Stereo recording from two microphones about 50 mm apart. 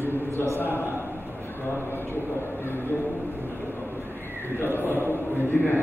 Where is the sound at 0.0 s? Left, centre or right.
Left.